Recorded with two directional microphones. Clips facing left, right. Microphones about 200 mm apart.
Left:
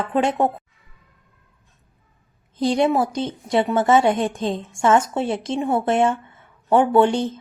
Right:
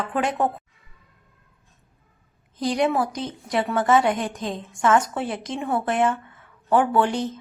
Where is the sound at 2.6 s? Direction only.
25° left (ahead or behind).